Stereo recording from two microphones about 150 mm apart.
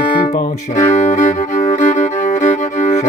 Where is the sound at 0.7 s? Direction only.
50° left (ahead or behind).